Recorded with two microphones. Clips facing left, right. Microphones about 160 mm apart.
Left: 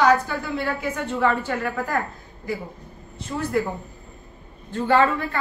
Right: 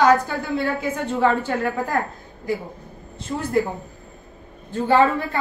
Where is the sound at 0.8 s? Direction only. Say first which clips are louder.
Right 2 dB; 25° right (ahead or behind).